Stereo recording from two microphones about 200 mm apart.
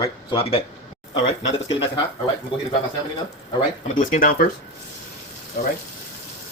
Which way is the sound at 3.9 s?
45° left (ahead or behind).